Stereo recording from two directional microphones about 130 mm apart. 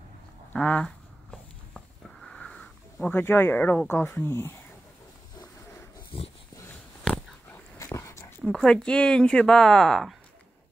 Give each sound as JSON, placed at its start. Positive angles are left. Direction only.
{"t": 0.5, "sound": "a sound", "side_deg": 10}
{"t": 3.1, "sound": "speech", "side_deg": 15}
{"t": 6.1, "sound": "dog", "side_deg": 45}
{"t": 6.5, "sound": "a sound", "side_deg": 20}
{"t": 7.4, "sound": "dog", "side_deg": 20}
{"t": 8.4, "sound": "speech", "side_deg": 0}